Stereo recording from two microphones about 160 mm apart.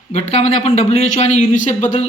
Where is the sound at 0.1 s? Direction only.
45° left (ahead or behind).